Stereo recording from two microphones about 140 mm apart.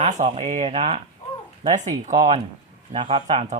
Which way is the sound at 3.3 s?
55° right (ahead or behind).